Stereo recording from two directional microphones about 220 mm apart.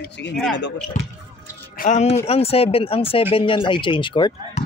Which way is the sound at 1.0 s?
35° left (ahead or behind).